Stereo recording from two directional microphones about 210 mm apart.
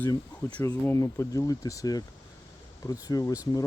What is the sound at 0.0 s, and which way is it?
Speech, 15° left (ahead or behind).